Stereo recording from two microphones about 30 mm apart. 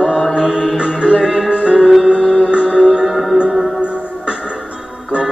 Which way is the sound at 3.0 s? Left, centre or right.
Centre.